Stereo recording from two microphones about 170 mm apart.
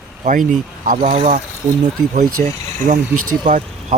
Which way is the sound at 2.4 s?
55° right (ahead or behind).